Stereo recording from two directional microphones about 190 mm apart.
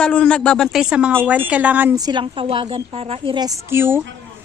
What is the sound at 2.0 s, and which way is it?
A woman's voice, 25° right (ahead or behind).